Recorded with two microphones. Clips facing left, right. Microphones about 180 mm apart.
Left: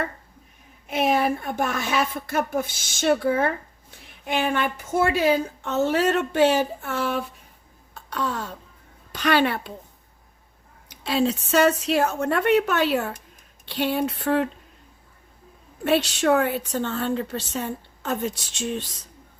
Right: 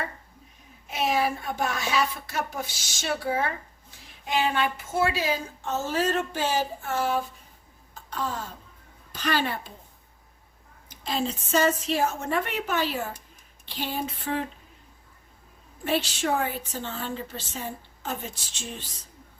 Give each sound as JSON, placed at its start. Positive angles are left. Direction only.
{"t": 0.9, "sound": "a woman's voice", "side_deg": 55}
{"t": 7.9, "sound": "a sound", "side_deg": 70}
{"t": 9.1, "sound": "a woman's voice", "side_deg": 70}
{"t": 10.8, "sound": "a woman's voice", "side_deg": 70}
{"t": 15.8, "sound": "a woman's voice", "side_deg": 70}